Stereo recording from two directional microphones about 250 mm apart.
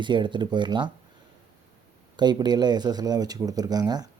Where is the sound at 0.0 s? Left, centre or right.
Centre.